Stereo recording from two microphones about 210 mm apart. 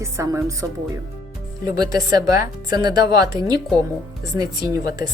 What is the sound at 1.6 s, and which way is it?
Speech, 20° right (ahead or behind).